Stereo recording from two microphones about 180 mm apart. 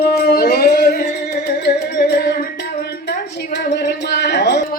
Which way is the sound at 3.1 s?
70° left (ahead or behind).